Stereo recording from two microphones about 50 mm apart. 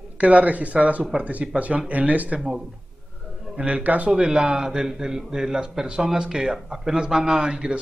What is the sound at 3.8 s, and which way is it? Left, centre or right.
Speech, right.